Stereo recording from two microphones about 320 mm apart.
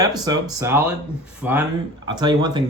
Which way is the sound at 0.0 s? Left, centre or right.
Centre.